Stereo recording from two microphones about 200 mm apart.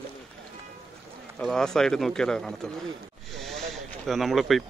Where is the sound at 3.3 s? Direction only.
Centre (ahead or behind).